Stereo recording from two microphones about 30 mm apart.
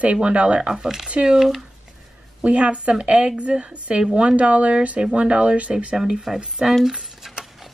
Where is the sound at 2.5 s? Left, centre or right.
Right.